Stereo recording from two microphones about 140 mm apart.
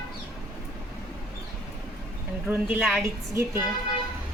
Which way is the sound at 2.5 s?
10° right (ahead or behind).